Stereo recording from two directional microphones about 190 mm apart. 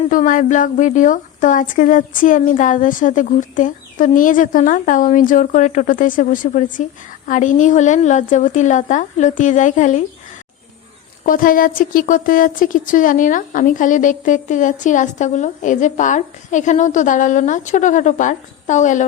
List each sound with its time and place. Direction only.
0.1 s speech: 45° left (ahead or behind)
11.3 s speech: 45° left (ahead or behind)